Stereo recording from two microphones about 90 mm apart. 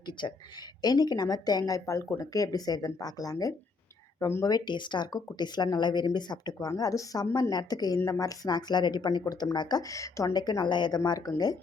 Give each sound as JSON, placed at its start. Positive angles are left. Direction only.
{"t": 0.2, "sound": "speech", "side_deg": 60}
{"t": 0.8, "sound": "speech", "side_deg": 45}
{"t": 4.2, "sound": "speech", "side_deg": 30}
{"t": 4.4, "sound": "speech", "side_deg": 50}
{"t": 10.3, "sound": "speech", "side_deg": 50}